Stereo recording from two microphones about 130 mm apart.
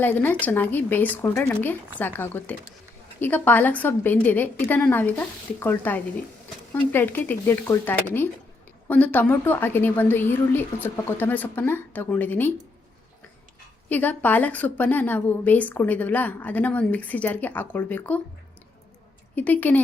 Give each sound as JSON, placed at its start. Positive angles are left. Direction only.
{"t": 0.0, "sound": "a woman's voice", "side_deg": 15}
{"t": 13.9, "sound": "a woman's voice", "side_deg": 15}
{"t": 19.4, "sound": "a woman's voice", "side_deg": 15}